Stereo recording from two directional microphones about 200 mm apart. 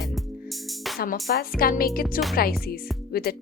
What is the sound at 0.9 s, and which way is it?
Speech, 50° left (ahead or behind).